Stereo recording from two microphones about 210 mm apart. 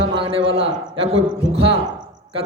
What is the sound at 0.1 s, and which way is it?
Speech, 25° right (ahead or behind).